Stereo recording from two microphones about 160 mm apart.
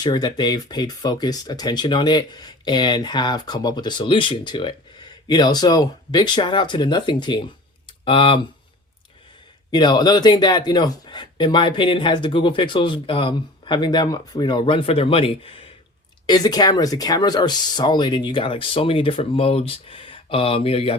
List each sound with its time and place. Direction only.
0.0 s speech: 25° left (ahead or behind)
9.7 s speech: 25° left (ahead or behind)
16.2 s speech: 25° left (ahead or behind)